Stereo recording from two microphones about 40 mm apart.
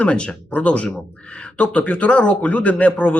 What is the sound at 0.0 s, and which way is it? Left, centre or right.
Speech, left.